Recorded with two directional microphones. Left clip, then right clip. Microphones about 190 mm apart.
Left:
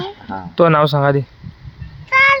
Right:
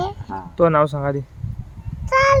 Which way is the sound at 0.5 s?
25° left (ahead or behind).